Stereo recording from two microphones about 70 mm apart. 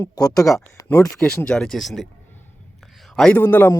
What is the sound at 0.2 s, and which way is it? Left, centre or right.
Speech, left.